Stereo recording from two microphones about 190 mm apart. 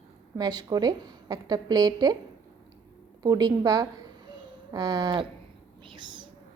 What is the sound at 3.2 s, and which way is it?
A woman's voice, 20° right (ahead or behind).